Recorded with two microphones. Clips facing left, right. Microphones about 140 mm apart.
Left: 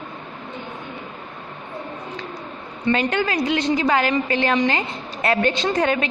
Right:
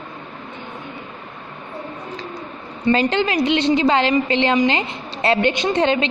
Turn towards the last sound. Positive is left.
turn(degrees=-25)  # may be behind; listen again after turning